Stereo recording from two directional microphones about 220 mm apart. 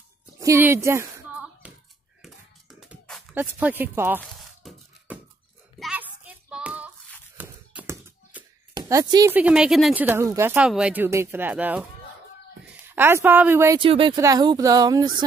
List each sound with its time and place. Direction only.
0.4 s a sound: 10° right (ahead or behind)
5.8 s hands: 5° right (ahead or behind)
7.3 s a sound: 10° right (ahead or behind)
8.7 s speech: 15° right (ahead or behind)
9.3 s speech: 5° right (ahead or behind)
13.7 s speech: 25° right (ahead or behind)